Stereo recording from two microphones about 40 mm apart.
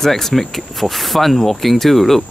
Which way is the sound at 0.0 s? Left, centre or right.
Centre.